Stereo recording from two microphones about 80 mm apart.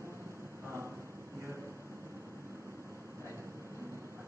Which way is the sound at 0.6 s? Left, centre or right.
Right.